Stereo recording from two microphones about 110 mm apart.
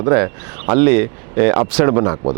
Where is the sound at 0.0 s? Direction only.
30° right (ahead or behind).